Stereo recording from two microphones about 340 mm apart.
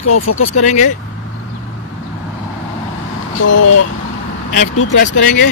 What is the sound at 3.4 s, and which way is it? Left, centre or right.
Speech, left.